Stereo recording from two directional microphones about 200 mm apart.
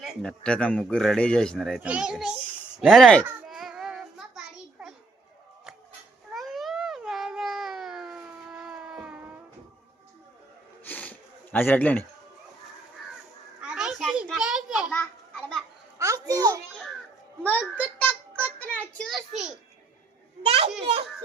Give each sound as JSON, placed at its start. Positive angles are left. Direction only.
{"t": 0.0, "sound": "a man's voice", "side_deg": 5}
{"t": 3.2, "sound": "child singing", "side_deg": 0}
{"t": 6.3, "sound": "cat", "side_deg": 0}
{"t": 10.8, "sound": "a sound", "side_deg": 10}
{"t": 13.6, "sound": "children playing", "side_deg": -5}
{"t": 16.0, "sound": "a sound", "side_deg": -15}
{"t": 17.4, "sound": "a sound", "side_deg": 10}
{"t": 18.3, "sound": "music", "side_deg": 10}
{"t": 20.4, "sound": "children playing", "side_deg": -30}